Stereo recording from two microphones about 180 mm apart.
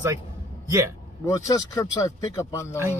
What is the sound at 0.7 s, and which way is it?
Speech, 15° right (ahead or behind).